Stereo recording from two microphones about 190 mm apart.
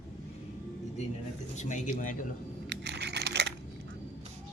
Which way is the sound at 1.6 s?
40° left (ahead or behind).